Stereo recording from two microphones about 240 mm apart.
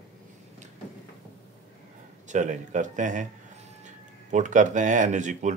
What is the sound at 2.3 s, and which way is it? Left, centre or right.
Speech, right.